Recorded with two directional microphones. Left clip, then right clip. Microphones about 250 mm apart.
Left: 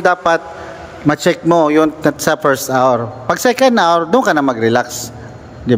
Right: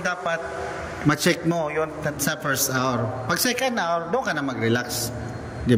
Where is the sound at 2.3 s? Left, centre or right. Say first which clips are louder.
Left 10 dB; centre.